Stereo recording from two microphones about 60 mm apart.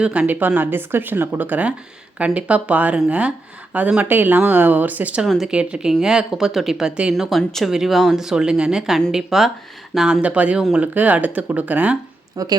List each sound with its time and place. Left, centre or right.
0.0 s speech: right
7.1 s speech: centre
9.1 s speech: centre
10.2 s speech: right
12.4 s a woman's voice: right